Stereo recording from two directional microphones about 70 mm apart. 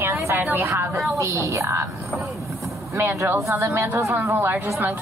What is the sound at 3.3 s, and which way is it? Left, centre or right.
Speech, right.